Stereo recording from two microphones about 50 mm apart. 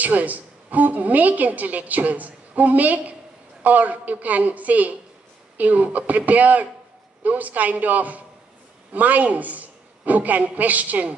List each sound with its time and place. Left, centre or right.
0.0 s a woman's voice: right